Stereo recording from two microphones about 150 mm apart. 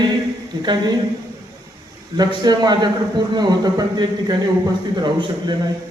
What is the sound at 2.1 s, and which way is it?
A man's voice, 25° right (ahead or behind).